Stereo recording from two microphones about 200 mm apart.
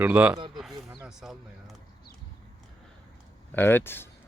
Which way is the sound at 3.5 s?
10° left (ahead or behind).